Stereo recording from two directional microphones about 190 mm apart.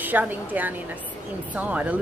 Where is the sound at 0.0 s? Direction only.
10° right (ahead or behind).